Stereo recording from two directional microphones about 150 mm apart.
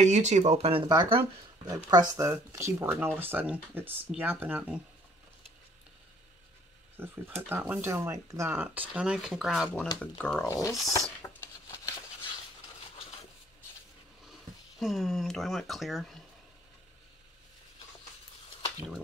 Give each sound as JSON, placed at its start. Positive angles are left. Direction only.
{"t": 0.0, "sound": "speech", "side_deg": -50}
{"t": 1.9, "sound": "speech", "side_deg": -25}
{"t": 7.0, "sound": "speech", "side_deg": -15}
{"t": 10.9, "sound": "patter", "side_deg": 20}
{"t": 14.8, "sound": "speech", "side_deg": 0}